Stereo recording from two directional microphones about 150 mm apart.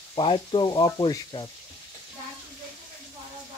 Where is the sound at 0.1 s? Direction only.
35° left (ahead or behind).